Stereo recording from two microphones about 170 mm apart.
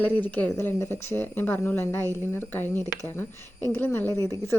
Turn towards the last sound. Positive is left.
turn(degrees=15)  # may be behind; listen again after turning